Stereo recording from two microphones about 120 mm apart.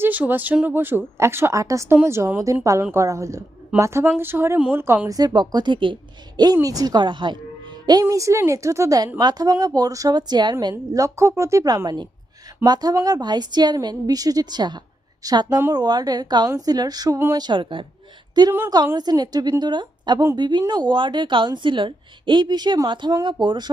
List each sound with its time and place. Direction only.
0.0 s a woman's voice: 15° right (ahead or behind); by 7.3 s 40° right (ahead or behind)
8.0 s a woman's voice: 25° right (ahead or behind); by 23.6 s 40° right (ahead or behind)